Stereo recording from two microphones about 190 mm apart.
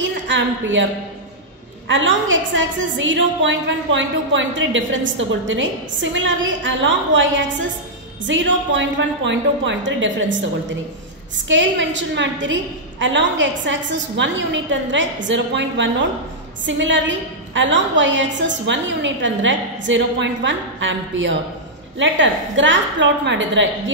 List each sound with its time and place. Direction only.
0.0 s a woman's voice: 70° right (ahead or behind)
1.9 s a woman's voice: 80° right